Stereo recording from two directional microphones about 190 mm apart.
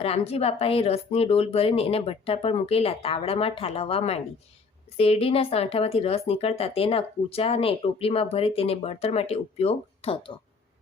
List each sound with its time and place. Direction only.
0.0 s speech: 30° left (ahead or behind)